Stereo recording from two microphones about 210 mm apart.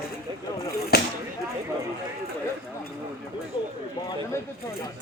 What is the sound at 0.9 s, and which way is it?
Speech, 50° left (ahead or behind).